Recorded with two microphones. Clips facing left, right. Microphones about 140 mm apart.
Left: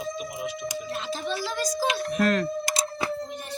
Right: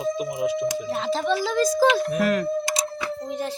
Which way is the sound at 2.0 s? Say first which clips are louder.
Right 2 dB; 10° right (ahead or behind).